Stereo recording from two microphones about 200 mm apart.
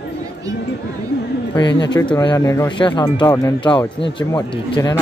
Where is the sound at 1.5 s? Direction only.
20° left (ahead or behind).